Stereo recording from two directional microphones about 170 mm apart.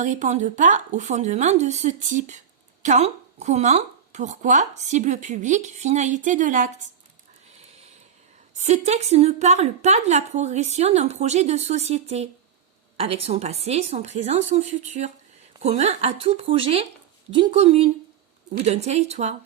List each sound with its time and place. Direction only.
0.0 s speech: 45° right (ahead or behind)
8.5 s a woman's voice: 40° right (ahead or behind)